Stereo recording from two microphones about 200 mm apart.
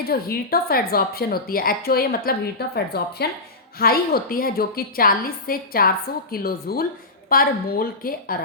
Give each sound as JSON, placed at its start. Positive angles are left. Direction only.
{"t": 0.0, "sound": "speech", "side_deg": 50}